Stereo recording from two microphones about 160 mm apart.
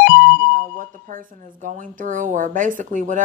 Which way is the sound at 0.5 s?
55° right (ahead or behind).